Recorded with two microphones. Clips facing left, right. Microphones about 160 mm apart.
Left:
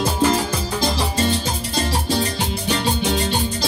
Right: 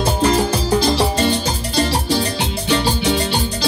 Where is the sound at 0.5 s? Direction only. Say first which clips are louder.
Right 6 dB; 70° right (ahead or behind).